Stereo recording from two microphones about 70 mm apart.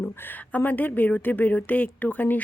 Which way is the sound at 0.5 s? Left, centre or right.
Left.